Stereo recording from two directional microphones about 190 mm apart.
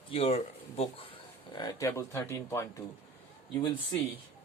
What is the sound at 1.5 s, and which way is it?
Speech, 20° left (ahead or behind).